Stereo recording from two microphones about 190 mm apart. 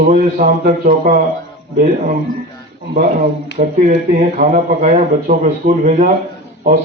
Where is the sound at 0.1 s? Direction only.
45° right (ahead or behind).